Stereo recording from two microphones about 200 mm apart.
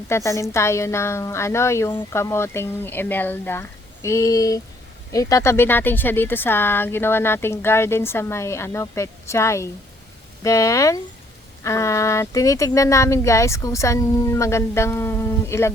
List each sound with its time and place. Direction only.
0.1 s speech: 15° left (ahead or behind)